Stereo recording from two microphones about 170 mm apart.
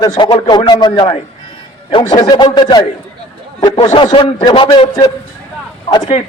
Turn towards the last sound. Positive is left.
turn(degrees=25)  # may be behind; listen again after turning